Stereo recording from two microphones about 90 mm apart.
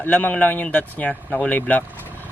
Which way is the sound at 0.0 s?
20° left (ahead or behind).